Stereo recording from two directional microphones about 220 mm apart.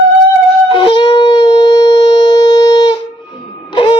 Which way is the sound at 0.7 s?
20° left (ahead or behind).